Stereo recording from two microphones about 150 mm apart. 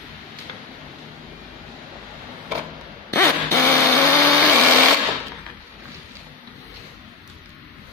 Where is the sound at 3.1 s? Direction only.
15° left (ahead or behind).